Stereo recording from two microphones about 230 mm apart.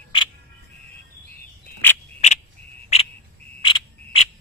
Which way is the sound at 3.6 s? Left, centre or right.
Left.